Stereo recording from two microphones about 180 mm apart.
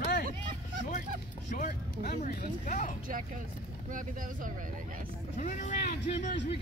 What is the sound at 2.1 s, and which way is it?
Speech, 45° left (ahead or behind).